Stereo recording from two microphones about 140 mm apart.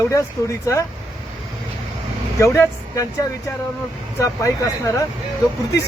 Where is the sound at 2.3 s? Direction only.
20° left (ahead or behind).